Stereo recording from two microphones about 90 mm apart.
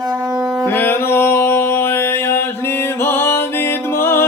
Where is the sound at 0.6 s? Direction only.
25° left (ahead or behind).